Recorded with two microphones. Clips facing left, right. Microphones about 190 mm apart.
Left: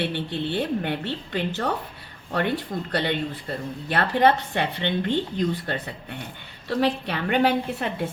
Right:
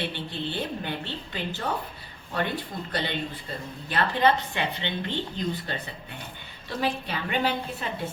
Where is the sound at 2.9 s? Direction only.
60° left (ahead or behind).